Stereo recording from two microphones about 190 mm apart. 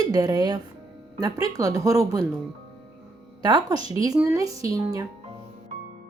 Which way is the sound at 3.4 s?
20° right (ahead or behind).